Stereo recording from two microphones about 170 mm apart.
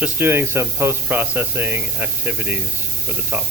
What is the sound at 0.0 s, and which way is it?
Speech, 10° right (ahead or behind).